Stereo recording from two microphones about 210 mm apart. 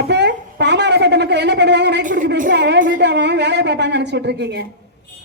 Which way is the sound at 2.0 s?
40° right (ahead or behind).